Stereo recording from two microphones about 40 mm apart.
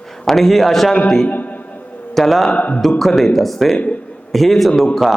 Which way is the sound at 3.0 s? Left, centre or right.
Centre.